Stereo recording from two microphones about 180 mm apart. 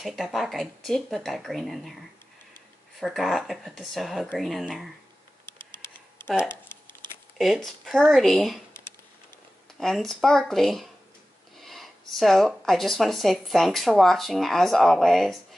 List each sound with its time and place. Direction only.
0.0 s speech: centre (ahead or behind)
3.0 s speech: centre (ahead or behind)
5.4 s tick: 25° right (ahead or behind)
6.2 s speech: 5° right (ahead or behind)
6.5 s crumpling: 10° left (ahead or behind)
7.3 s speech: centre (ahead or behind)
9.8 s speech: centre (ahead or behind)